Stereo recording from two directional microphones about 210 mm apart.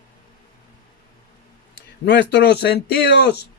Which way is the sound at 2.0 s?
55° left (ahead or behind).